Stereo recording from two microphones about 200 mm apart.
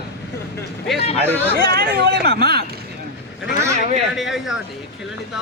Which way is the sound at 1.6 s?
50° right (ahead or behind).